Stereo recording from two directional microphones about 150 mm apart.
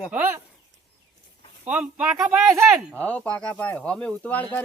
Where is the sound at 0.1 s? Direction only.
15° right (ahead or behind).